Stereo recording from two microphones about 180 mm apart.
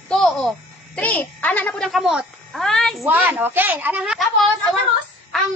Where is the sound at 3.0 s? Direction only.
10° right (ahead or behind).